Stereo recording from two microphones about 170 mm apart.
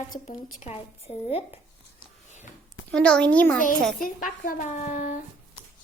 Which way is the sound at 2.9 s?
5° left (ahead or behind).